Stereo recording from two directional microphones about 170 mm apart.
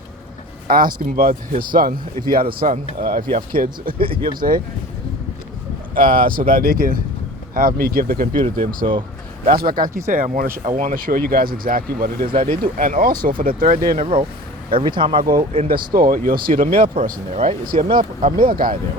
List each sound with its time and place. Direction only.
0.7 s speech: 55° right (ahead or behind)
3.9 s speech: 30° right (ahead or behind)
4.2 s speech: 55° right (ahead or behind)
6.1 s speech: 55° right (ahead or behind)
8.8 s speech: 40° right (ahead or behind)
9.5 s speech: 60° right (ahead or behind)
14.0 s speech: 30° right (ahead or behind)
15.7 s speech: 60° right (ahead or behind)
16.9 s speech: 35° right (ahead or behind)
17.7 s speech: 55° right (ahead or behind)